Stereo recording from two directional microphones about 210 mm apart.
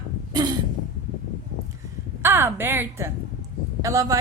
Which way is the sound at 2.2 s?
10° right (ahead or behind).